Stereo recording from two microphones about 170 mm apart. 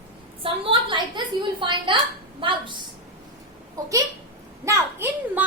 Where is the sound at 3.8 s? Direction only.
20° right (ahead or behind).